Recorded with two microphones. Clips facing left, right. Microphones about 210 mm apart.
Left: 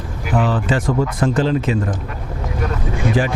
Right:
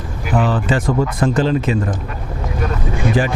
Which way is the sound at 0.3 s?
25° right (ahead or behind).